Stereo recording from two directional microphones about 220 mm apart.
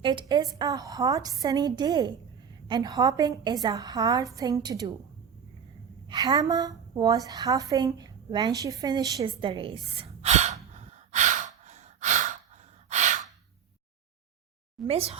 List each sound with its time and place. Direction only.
0.0 s a woman's voice: 20° right (ahead or behind)
6.1 s a woman's voice: 15° right (ahead or behind)
10.8 s sigh: 30° right (ahead or behind)
12.9 s gasp: 35° right (ahead or behind)
14.8 s a woman's voice: 25° right (ahead or behind)